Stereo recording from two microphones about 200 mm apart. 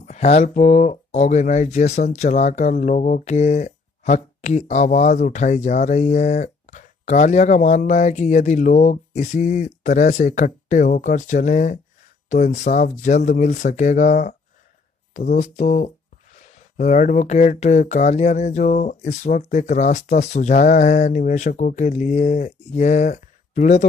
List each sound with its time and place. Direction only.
0.0 s speech: 35° left (ahead or behind)